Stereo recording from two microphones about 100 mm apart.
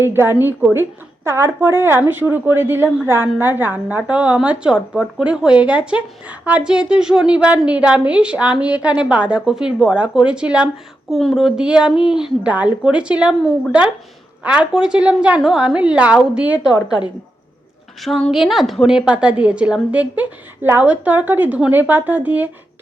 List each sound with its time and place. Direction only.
0.0 s a woman's voice: 25° right (ahead or behind)
11.1 s a woman's voice: centre (ahead or behind)
14.4 s a woman's voice: 10° right (ahead or behind)
16.7 s a woman's voice: 45° left (ahead or behind)
18.0 s a woman's voice: centre (ahead or behind); by 22.4 s 15° right (ahead or behind)